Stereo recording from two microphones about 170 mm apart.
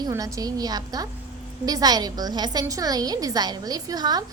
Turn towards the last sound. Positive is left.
turn(degrees=-25)  # may be behind; listen again after turning